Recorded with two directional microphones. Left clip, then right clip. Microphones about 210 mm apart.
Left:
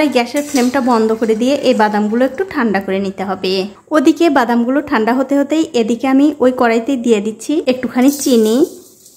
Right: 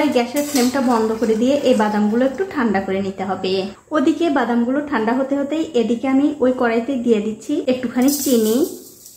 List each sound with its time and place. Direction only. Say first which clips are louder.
0.1 s a woman's voice: left 3 dB; 30° left (ahead or behind)